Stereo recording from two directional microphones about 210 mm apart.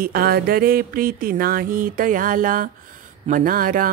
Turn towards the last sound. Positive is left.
turn(degrees=-40)  # may be behind; listen again after turning